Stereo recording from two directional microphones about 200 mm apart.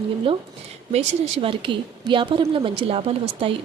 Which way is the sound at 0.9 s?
25° right (ahead or behind).